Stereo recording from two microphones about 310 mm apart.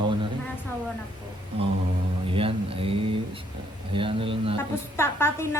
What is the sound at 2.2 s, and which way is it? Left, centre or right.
Speech, centre.